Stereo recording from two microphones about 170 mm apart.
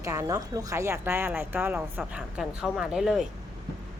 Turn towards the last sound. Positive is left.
turn(degrees=-5)  # may be behind; listen again after turning